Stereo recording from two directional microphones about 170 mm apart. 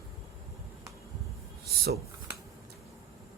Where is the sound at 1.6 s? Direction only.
70° right (ahead or behind).